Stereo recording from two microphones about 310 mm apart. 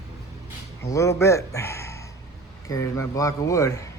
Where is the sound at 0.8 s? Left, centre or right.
Centre.